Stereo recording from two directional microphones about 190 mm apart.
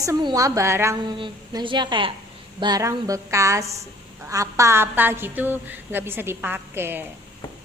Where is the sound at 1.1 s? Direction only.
25° right (ahead or behind).